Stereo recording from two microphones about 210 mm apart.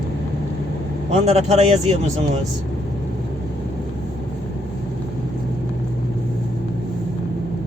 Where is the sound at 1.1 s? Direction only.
30° right (ahead or behind).